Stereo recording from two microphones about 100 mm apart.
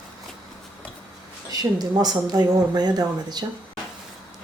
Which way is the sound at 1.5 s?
40° right (ahead or behind).